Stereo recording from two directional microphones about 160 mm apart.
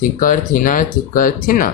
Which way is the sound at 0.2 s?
55° left (ahead or behind).